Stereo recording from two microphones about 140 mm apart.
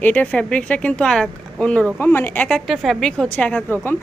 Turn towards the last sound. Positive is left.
turn(degrees=10)  # may be behind; listen again after turning